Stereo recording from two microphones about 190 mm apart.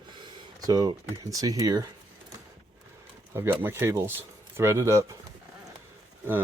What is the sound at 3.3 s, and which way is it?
Speech, 10° right (ahead or behind).